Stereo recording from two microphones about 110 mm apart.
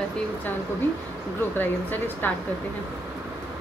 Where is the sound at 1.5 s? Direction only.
15° left (ahead or behind).